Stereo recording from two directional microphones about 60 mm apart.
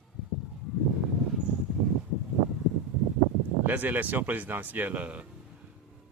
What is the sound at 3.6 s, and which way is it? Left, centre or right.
Speech, right.